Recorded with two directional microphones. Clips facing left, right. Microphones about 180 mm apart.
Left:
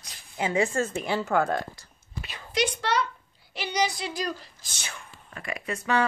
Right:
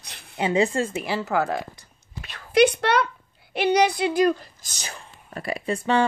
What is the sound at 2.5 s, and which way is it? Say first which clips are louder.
A woman's voice: right 8 dB; 60° right (ahead or behind).